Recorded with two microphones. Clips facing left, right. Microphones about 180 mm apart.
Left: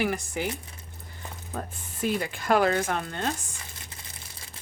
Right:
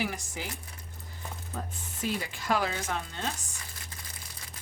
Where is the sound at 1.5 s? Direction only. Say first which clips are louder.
Left 5 dB; 55° left (ahead or behind).